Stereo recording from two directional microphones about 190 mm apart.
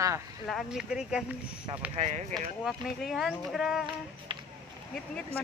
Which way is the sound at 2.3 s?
Centre (ahead or behind).